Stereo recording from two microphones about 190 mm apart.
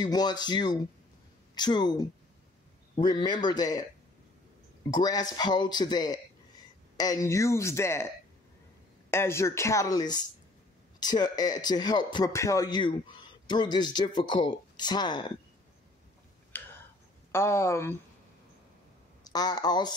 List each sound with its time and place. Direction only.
0.0 s a man's voice: 20° left (ahead or behind)
4.9 s a man's voice: 20° left (ahead or behind)
9.1 s a man's voice: 15° left (ahead or behind)
16.5 s tick-tock: 10° left (ahead or behind)
17.3 s speech: 15° left (ahead or behind)
19.2 s speech: 20° left (ahead or behind)